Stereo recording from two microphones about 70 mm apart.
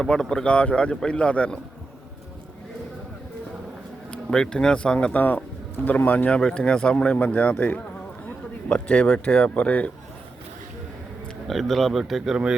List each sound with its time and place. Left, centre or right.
0.0 s speech: centre
4.1 s speech: centre
5.1 s speech: left
8.7 s speech: centre
11.4 s speech: centre